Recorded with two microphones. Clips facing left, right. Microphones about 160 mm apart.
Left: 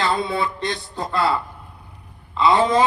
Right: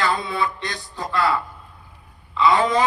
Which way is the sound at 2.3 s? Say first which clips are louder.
Left 1 dB; 25° left (ahead or behind).